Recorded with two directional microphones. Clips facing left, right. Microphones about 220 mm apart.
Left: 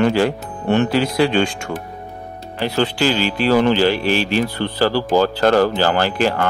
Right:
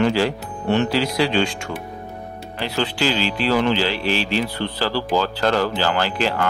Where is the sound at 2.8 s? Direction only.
45° left (ahead or behind).